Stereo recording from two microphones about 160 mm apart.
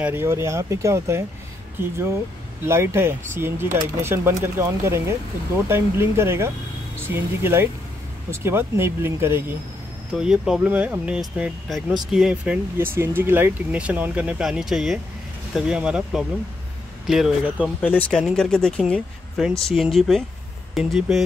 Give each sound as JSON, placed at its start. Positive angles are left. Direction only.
{"t": 0.0, "sound": "speech", "side_deg": -15}
{"t": 10.2, "sound": "speech", "side_deg": -5}